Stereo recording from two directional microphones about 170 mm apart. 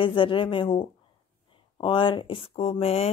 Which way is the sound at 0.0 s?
30° left (ahead or behind).